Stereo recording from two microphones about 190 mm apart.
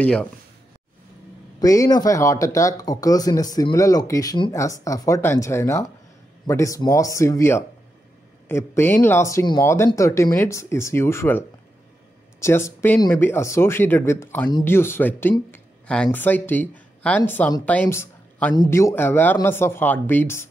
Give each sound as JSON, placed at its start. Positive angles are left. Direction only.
{"t": 0.0, "sound": "speech", "side_deg": 5}
{"t": 1.6, "sound": "speech", "side_deg": 20}